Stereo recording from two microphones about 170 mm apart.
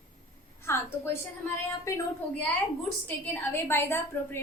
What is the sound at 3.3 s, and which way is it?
A woman's voice, 15° left (ahead or behind).